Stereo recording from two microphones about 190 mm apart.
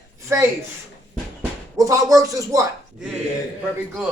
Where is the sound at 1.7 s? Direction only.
15° right (ahead or behind).